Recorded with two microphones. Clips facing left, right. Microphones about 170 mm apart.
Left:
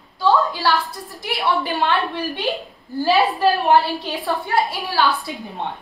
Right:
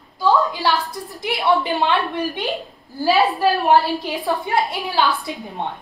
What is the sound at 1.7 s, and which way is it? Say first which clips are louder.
Speech: right 1 dB; 20° right (ahead or behind).